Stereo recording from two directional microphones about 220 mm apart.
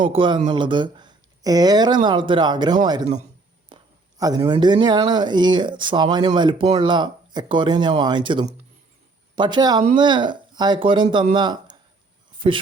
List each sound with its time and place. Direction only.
0.0 s speech: 20° right (ahead or behind)
4.2 s speech: 15° right (ahead or behind)